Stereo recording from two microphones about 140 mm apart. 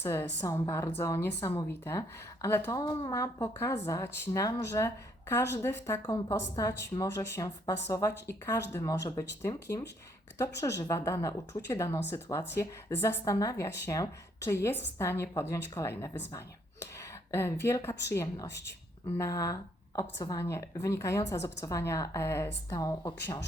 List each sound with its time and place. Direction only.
0.0 s a woman's voice: 20° left (ahead or behind)